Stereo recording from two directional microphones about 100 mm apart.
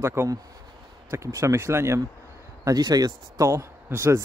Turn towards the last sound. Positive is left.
turn(degrees=-25)  # may be behind; listen again after turning